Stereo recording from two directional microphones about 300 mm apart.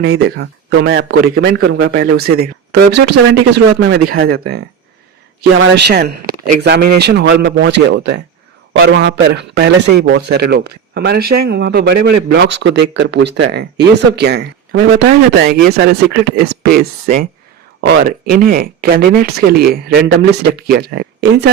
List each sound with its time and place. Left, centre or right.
0.0 s a man's voice: right